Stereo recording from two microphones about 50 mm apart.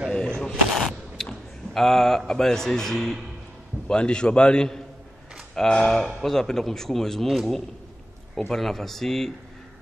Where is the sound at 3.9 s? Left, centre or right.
Centre.